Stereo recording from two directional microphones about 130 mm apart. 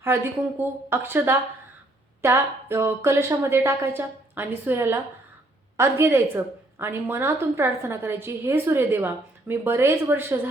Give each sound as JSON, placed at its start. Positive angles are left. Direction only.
{"t": 0.6, "sound": "a woman's voice", "side_deg": -15}